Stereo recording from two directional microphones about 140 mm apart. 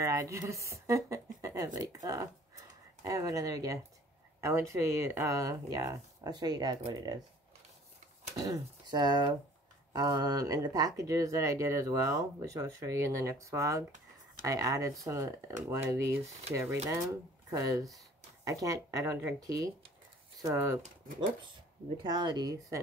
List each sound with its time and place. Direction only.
0.0 s speech: 20° right (ahead or behind)
8.4 s speech: 30° right (ahead or behind)
21.9 s speech: 30° right (ahead or behind)